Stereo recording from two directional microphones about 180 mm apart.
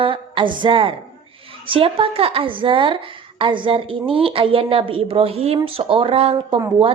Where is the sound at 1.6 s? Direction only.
30° right (ahead or behind).